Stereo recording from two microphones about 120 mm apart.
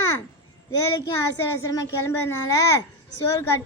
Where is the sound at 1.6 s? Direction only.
25° left (ahead or behind).